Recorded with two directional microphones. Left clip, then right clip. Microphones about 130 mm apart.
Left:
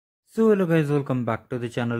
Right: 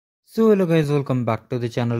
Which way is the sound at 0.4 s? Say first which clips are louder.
Right 3 dB; 20° right (ahead or behind).